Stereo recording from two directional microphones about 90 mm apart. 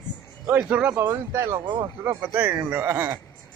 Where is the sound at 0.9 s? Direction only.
30° right (ahead or behind).